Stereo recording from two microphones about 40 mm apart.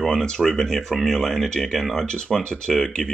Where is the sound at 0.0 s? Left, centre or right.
Centre.